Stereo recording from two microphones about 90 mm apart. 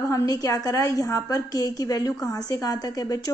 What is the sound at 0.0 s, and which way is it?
A woman's voice, 35° left (ahead or behind).